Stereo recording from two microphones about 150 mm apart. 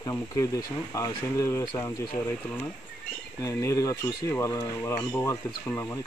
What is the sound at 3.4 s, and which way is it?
Speech, 20° left (ahead or behind).